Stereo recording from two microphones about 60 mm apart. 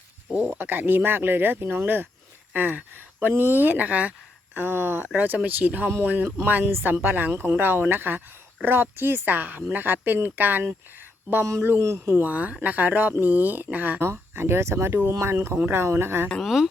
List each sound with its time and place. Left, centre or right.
0.3 s speech: right
4.5 s speech: right
11.8 s speech: right
12.1 s speech: right
14.0 s speech: right
16.4 s speech: centre